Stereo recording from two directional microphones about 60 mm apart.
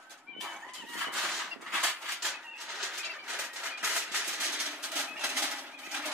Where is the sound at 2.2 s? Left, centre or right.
Centre.